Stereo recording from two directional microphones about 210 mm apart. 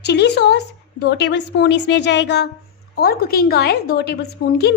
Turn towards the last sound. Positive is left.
turn(degrees=55)  # may be behind; listen again after turning